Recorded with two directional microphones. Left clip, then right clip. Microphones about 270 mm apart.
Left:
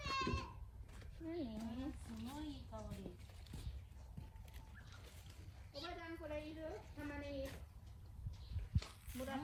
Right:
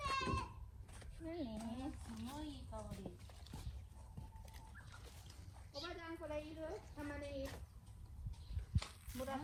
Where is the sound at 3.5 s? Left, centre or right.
Centre.